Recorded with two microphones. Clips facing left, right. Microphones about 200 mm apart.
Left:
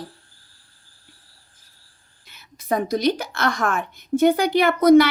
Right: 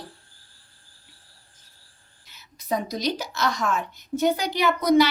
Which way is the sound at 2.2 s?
60° left (ahead or behind).